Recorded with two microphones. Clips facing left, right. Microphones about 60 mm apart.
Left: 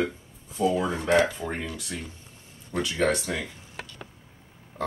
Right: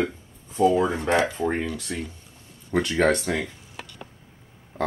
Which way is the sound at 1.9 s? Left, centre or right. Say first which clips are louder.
Right 4 dB; right.